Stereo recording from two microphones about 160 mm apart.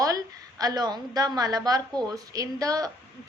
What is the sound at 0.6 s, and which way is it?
A woman's voice, 25° right (ahead or behind).